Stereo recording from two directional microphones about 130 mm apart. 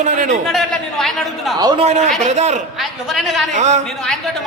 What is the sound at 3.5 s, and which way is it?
Speech, 65° right (ahead or behind).